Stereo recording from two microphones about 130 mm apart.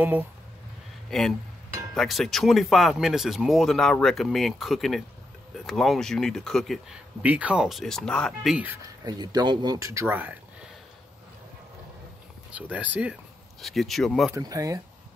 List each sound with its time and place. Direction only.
1.1 s speech: 5° left (ahead or behind)
7.2 s speech: 10° right (ahead or behind)
9.0 s speech: 30° right (ahead or behind)
9.8 s speech: 20° right (ahead or behind)
12.4 s speech: 10° right (ahead or behind)
13.6 s speech: centre (ahead or behind)
14.3 s speech: 25° right (ahead or behind)